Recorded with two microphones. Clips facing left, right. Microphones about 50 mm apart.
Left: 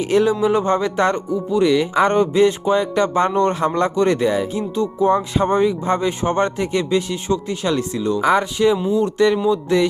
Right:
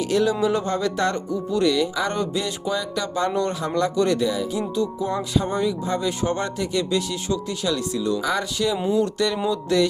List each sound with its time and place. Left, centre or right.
0.0 s speech: left